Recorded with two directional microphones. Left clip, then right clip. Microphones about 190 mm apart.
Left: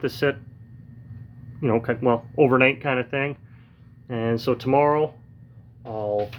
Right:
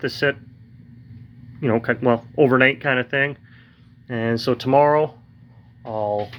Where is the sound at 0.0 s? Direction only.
10° left (ahead or behind).